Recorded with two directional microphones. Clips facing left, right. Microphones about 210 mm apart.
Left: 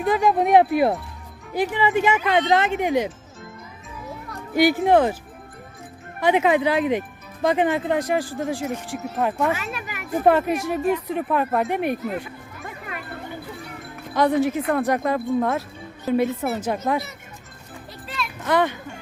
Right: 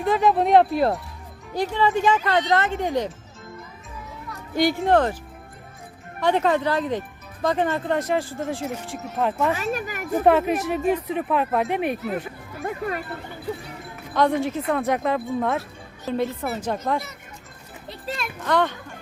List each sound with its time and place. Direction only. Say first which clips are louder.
0.0 s speech: even; centre (ahead or behind)
0.4 s speech: left 2 dB; 15° left (ahead or behind)
4.5 s speech: left 2 dB; 5° left (ahead or behind)
6.1 s speech: left 2 dB; 10° left (ahead or behind)
8.4 s speech: left 2 dB; centre (ahead or behind)
9.5 s speech: right 2 dB; 40° right (ahead or behind)
10.2 s speech: even; centre (ahead or behind)
12.5 s music: right 10 dB; 40° right (ahead or behind)
14.2 s speech: left 2 dB; 5° left (ahead or behind)
18.4 s speech: left 1 dB; 10° left (ahead or behind)